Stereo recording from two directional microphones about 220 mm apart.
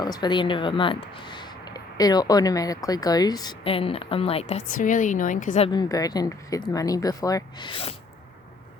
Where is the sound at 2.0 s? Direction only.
15° left (ahead or behind); by 5.5 s 35° left (ahead or behind).